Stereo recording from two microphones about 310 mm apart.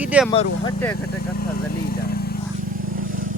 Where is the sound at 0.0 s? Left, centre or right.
Centre.